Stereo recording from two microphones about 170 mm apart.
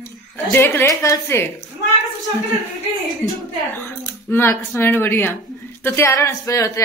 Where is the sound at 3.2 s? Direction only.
10° left (ahead or behind).